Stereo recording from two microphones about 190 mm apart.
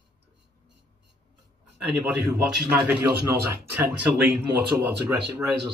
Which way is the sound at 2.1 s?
10° right (ahead or behind).